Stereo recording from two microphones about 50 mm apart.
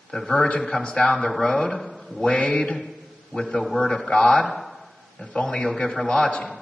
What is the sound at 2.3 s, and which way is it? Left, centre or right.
A man's voice, left.